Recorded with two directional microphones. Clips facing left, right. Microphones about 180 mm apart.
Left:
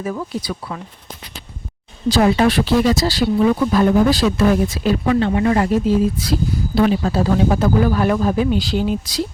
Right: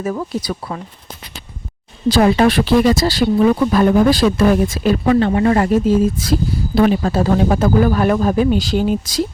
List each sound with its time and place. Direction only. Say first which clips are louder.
0.0 s speech: right 3 dB; 40° right (ahead or behind)
2.0 s speech: right 2 dB; 55° right (ahead or behind)